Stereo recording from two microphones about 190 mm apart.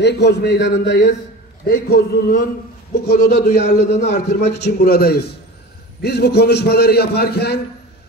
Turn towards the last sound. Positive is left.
turn(degrees=60)  # may be behind; listen again after turning